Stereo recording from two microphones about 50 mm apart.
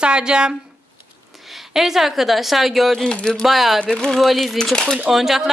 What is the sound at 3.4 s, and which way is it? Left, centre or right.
Speech, centre.